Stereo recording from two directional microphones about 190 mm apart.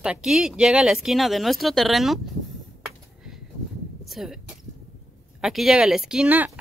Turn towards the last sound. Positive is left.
turn(degrees=-5)  # may be behind; listen again after turning